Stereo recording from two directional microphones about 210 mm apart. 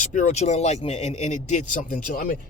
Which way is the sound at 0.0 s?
35° left (ahead or behind).